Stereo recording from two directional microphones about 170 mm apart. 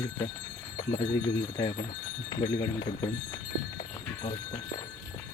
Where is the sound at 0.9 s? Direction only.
25° left (ahead or behind).